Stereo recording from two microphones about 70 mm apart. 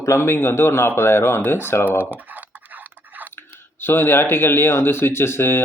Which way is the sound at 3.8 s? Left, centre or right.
Left.